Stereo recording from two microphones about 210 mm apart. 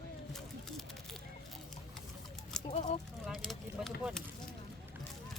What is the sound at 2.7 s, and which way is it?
Speech, 30° left (ahead or behind).